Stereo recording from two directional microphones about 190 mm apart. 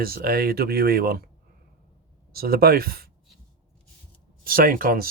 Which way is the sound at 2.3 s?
55° right (ahead or behind).